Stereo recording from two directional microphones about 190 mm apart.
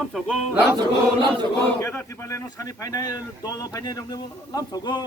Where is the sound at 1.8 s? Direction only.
10° left (ahead or behind).